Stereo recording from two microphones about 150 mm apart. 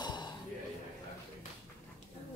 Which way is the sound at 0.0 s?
30° left (ahead or behind).